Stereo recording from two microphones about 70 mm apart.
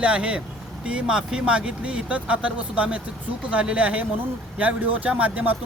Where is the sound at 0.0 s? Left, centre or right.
Centre.